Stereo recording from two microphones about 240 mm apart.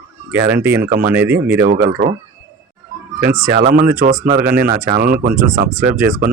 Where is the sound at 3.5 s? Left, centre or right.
Right.